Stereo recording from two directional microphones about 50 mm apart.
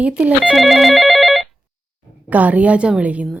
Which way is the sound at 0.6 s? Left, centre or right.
Centre.